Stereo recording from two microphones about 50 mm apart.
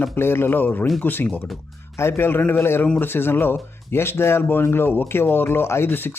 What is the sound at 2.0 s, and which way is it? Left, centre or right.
Speech, left.